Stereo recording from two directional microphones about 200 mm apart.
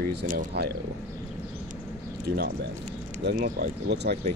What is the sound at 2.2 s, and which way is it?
Speech, 50° right (ahead or behind).